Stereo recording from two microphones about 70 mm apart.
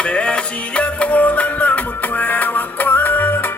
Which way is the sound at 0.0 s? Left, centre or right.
Centre.